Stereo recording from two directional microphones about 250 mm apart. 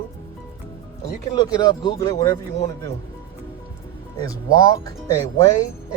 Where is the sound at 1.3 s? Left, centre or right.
Centre.